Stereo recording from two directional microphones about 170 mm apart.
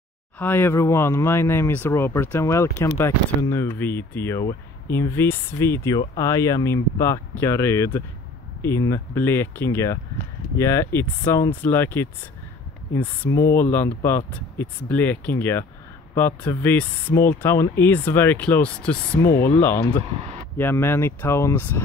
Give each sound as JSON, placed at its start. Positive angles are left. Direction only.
{"t": 0.4, "sound": "speech", "side_deg": 10}